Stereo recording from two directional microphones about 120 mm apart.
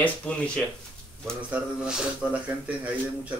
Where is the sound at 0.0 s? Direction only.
10° left (ahead or behind).